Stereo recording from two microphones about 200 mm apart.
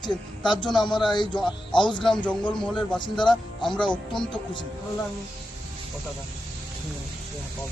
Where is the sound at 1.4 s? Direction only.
5° left (ahead or behind).